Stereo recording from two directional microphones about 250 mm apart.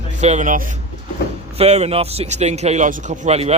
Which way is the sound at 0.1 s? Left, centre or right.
Right.